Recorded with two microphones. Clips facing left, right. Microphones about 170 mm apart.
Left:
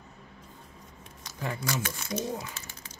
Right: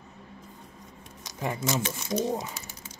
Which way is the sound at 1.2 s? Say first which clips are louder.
Right 4 dB; 20° right (ahead or behind).